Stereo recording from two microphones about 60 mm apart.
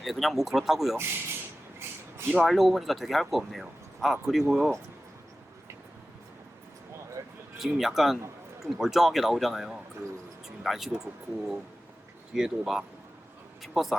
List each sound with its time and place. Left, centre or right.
0.0 s speech: centre
0.9 s speech: right
2.3 s speech: centre
7.2 s a sound: right
7.6 s speech: centre